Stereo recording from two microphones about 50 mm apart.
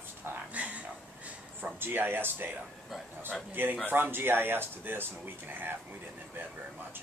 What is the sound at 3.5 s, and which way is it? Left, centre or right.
Speech, right.